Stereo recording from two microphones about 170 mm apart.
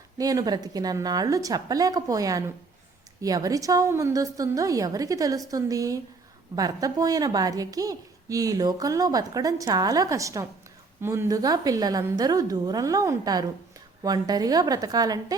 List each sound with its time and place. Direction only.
0.2 s a woman's voice: 20° right (ahead or behind)